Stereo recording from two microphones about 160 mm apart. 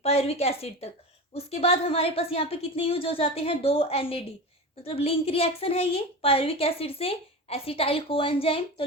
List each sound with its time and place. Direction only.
0.0 s a woman's voice: 40° left (ahead or behind)